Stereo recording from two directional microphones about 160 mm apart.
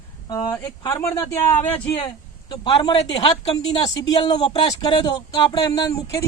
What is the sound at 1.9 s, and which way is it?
Speech, 30° left (ahead or behind).